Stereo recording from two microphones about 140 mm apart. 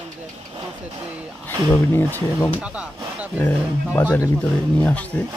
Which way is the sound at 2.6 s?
10° right (ahead or behind).